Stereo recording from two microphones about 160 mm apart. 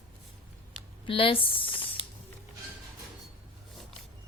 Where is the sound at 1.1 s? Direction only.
35° left (ahead or behind).